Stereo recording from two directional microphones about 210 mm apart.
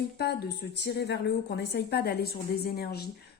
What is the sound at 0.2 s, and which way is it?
A woman's voice, 50° left (ahead or behind).